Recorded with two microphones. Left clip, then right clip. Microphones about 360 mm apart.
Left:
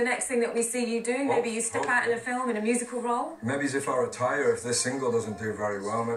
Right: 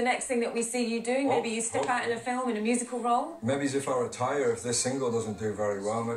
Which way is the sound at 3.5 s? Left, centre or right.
Centre.